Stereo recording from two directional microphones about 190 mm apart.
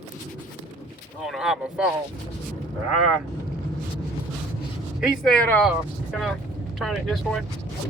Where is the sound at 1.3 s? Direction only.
Centre (ahead or behind).